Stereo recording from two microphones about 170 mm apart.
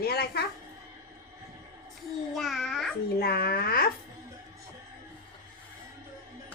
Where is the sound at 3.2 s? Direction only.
65° left (ahead or behind).